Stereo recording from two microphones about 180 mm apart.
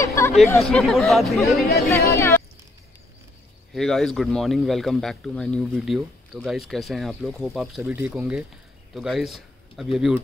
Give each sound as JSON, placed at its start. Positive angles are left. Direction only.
{"t": 0.0, "sound": "chatter", "side_deg": 15}
{"t": 0.6, "sound": "a man's voice", "side_deg": 0}
{"t": 2.1, "sound": "a sound", "side_deg": 15}
{"t": 3.7, "sound": "a man's voice", "side_deg": 5}